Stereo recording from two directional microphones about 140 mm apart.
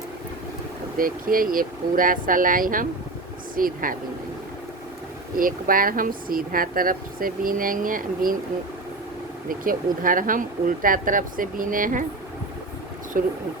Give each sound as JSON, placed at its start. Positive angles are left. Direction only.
{"t": 0.9, "sound": "speech", "side_deg": -90}
{"t": 5.4, "sound": "speech", "side_deg": -85}
{"t": 9.5, "sound": "speech", "side_deg": -85}
{"t": 13.2, "sound": "speech", "side_deg": -90}